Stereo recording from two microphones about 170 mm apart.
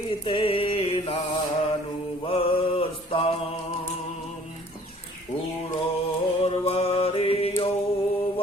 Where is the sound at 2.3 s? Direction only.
35° left (ahead or behind).